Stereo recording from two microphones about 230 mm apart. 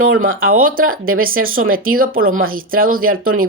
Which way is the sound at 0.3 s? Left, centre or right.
Right.